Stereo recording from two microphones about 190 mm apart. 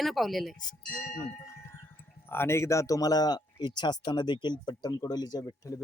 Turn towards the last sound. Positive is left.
turn(degrees=20)  # may be behind; listen again after turning